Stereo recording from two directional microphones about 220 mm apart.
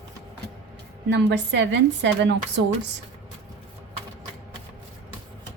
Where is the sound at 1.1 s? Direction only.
50° right (ahead or behind).